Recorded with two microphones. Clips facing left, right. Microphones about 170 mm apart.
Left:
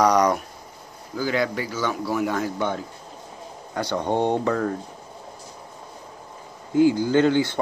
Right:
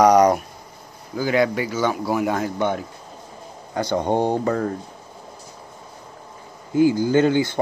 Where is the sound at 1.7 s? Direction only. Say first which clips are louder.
Right 4 dB; 50° right (ahead or behind).